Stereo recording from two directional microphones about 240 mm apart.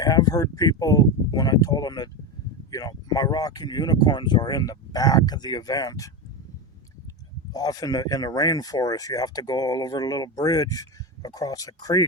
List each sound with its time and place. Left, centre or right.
0.0 s speech: centre
7.5 s speech: centre